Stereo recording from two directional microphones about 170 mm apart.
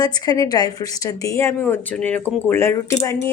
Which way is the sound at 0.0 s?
25° left (ahead or behind).